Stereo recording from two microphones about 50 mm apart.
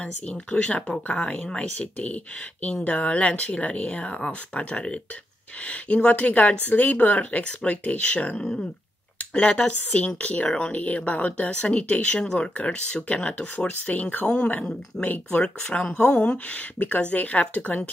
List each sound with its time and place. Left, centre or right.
0.0 s a woman's voice: left
8.4 s speech: centre
9.2 s a sound: left
9.5 s a woman's voice: left
13.7 s a woman's voice: left